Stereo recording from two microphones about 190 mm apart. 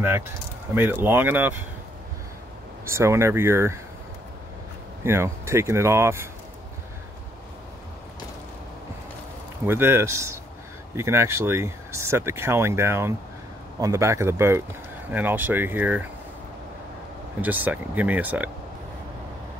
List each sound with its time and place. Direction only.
0.7 s speech: 10° right (ahead or behind)
2.9 s speech: 15° right (ahead or behind)
5.0 s speech: 15° right (ahead or behind)
9.7 s speech: 10° right (ahead or behind)
17.4 s speech: 10° right (ahead or behind)